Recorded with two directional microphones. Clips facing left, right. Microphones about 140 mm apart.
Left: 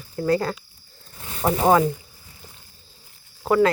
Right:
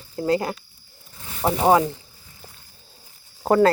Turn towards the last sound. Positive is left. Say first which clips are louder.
# right 2 dB
turn(degrees=-40)  # may be behind; listen again after turning